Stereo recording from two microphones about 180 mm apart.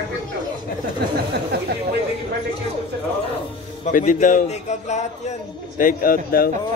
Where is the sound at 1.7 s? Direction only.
65° right (ahead or behind).